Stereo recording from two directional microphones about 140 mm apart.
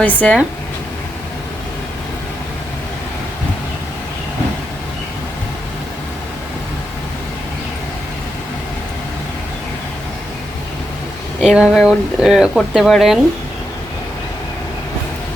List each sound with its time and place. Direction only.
0.0 s speech: 10° left (ahead or behind)
11.3 s speech: 5° right (ahead or behind)